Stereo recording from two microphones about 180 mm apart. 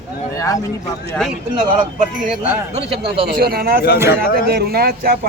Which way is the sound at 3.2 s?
55° right (ahead or behind).